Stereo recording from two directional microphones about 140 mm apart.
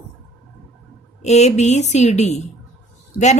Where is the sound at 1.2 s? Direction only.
55° left (ahead or behind).